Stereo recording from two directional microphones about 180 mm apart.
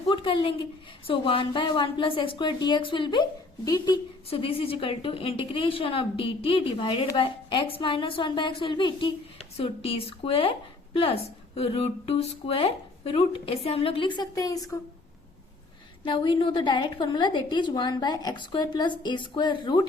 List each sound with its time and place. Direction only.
0.1 s a woman's voice: 30° left (ahead or behind)
16.0 s a woman's voice: 30° left (ahead or behind)